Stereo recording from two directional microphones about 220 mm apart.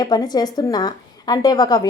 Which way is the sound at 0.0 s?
20° left (ahead or behind).